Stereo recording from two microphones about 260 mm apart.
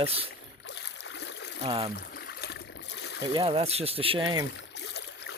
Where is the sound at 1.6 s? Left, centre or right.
Right.